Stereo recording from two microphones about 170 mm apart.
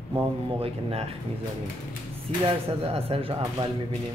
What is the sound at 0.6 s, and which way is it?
Speech, 35° right (ahead or behind).